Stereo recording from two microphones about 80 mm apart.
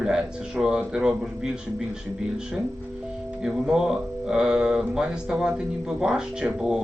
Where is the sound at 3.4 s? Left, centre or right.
Centre.